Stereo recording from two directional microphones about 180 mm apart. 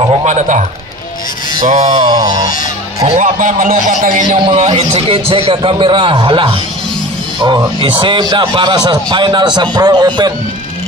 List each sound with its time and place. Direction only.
0.1 s a man's voice: 40° right (ahead or behind)
1.9 s speech: 25° right (ahead or behind)
3.0 s a man's voice: 35° right (ahead or behind)
3.3 s a man's voice: 50° right (ahead or behind)
4.5 s speech: 35° right (ahead or behind)